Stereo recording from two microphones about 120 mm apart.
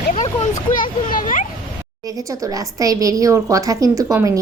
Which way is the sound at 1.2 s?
90° left.